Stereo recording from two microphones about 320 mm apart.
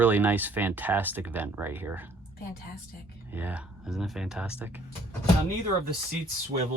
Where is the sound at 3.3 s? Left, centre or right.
Centre.